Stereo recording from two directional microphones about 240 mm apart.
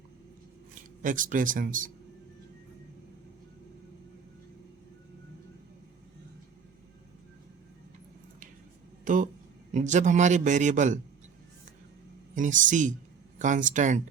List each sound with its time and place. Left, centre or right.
1.0 s a man's voice: right
9.0 s a sound: right
9.7 s a man's voice: right
12.3 s a man's voice: right